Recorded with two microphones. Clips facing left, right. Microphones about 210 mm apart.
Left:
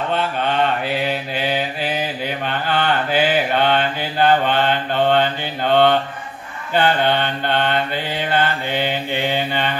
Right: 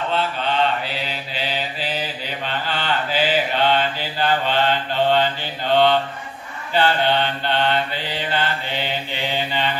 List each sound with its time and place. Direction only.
0.8 s mantra: 55° left (ahead or behind)